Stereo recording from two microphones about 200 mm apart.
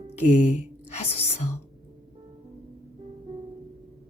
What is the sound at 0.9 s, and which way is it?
Whispering, 30° left (ahead or behind).